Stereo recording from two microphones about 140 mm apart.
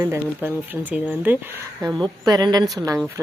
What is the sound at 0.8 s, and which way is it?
Speech, 10° right (ahead or behind).